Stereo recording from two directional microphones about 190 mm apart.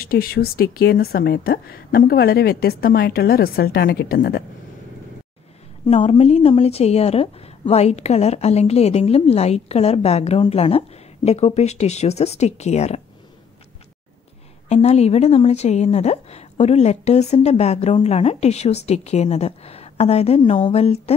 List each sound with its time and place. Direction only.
0.0 s a woman's voice: 50° left (ahead or behind)
5.9 s a woman's voice: 35° left (ahead or behind)
14.7 s a woman's voice: 35° left (ahead or behind)